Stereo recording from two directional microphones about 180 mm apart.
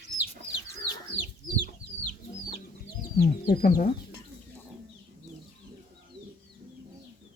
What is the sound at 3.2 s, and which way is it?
Speech, 60° left (ahead or behind).